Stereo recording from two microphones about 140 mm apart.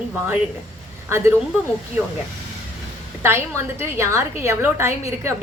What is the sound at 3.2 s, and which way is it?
A woman's voice, 20° right (ahead or behind).